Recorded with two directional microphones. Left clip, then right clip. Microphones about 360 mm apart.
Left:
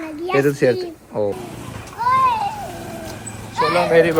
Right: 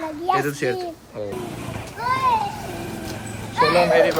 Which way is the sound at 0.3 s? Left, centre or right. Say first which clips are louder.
Left 11 dB; centre.